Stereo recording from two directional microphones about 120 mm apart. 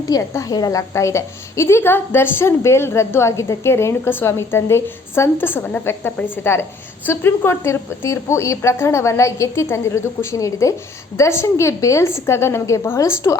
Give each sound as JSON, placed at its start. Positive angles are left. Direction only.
{"t": 0.1, "sound": "a woman's voice", "side_deg": 30}